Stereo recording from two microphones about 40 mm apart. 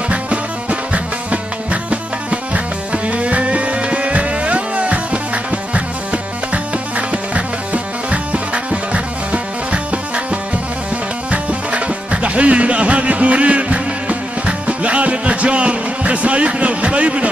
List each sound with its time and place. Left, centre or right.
0.1 s music: right